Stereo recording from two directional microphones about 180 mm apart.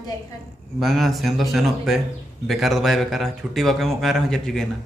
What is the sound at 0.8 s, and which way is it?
Speech, centre (ahead or behind).